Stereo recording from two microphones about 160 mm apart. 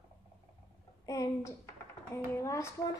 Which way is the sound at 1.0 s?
20° left (ahead or behind).